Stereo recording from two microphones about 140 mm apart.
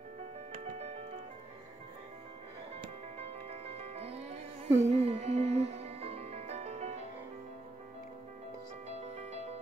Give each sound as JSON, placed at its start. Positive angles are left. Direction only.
{"t": 0.7, "sound": "music", "side_deg": -50}
{"t": 3.4, "sound": "music", "side_deg": -45}
{"t": 8.8, "sound": "music", "side_deg": -50}